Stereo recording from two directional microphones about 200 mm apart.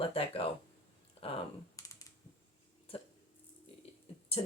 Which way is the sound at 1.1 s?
30° left (ahead or behind).